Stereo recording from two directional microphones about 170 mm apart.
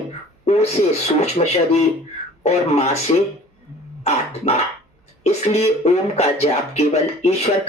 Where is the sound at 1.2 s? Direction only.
40° left (ahead or behind).